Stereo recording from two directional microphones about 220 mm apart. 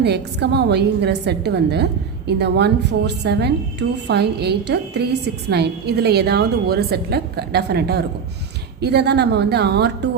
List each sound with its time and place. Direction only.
0.0 s a woman's voice: 50° right (ahead or behind)